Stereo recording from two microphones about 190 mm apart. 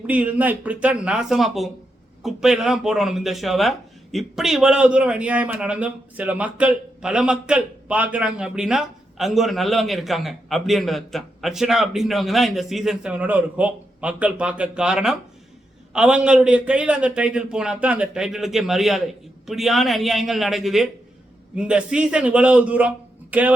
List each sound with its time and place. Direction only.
0.1 s speech: 10° right (ahead or behind)